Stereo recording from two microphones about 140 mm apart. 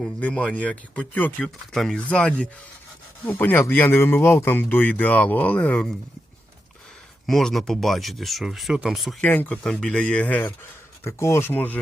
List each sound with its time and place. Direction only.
0.0 s speech: 10° left (ahead or behind)
7.3 s speech: centre (ahead or behind)
9.2 s speech: 15° left (ahead or behind)